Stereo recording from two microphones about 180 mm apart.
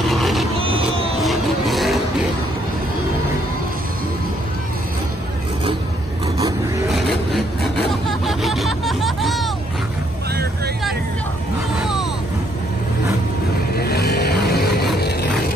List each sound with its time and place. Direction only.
0.0 s vehicle: centre (ahead or behind)
1.2 s music: centre (ahead or behind)
6.9 s vehicle: centre (ahead or behind)
13.7 s vehicle: 65° left (ahead or behind)